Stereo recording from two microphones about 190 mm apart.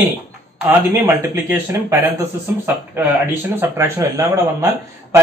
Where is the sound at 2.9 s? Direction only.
10° right (ahead or behind).